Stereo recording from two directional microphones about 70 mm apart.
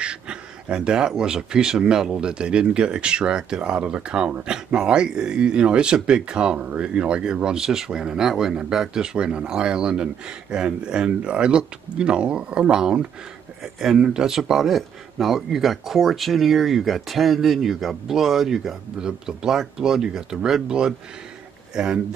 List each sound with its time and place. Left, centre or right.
0.0 s speech: centre